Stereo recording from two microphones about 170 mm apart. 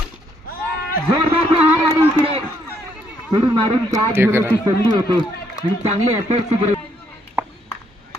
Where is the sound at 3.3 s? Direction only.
25° right (ahead or behind).